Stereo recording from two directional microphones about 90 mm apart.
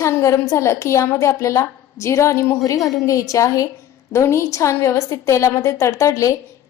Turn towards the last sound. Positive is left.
turn(degrees=35)  # may be behind; listen again after turning